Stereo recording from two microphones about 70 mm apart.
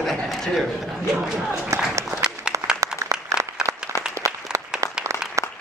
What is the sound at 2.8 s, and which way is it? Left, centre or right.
Applause, right.